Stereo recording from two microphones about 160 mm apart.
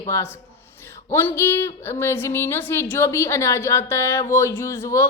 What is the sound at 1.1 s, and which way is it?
A woman's voice, 15° left (ahead or behind).